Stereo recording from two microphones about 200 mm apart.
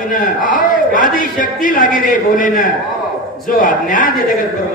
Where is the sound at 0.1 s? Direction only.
45° left (ahead or behind).